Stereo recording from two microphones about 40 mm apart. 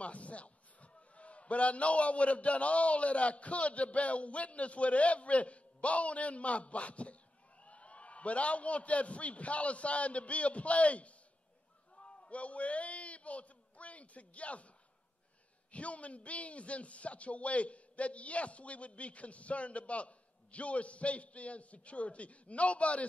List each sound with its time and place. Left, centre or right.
0.0 s a man's voice: left
11.9 s a sound: left
15.7 s speech: left